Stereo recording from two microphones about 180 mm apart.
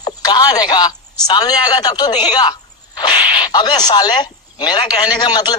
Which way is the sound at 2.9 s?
25° left (ahead or behind).